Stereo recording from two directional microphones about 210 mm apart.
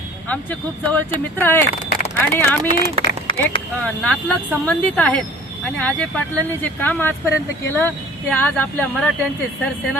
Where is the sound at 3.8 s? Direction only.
5° left (ahead or behind).